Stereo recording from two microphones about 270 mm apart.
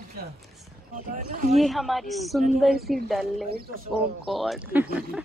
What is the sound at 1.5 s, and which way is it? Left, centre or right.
Speech, centre.